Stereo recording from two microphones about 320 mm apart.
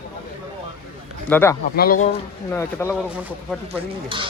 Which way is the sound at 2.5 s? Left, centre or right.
Centre.